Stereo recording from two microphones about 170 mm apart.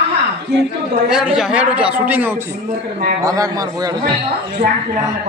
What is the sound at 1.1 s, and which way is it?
A man's voice, 5° right (ahead or behind).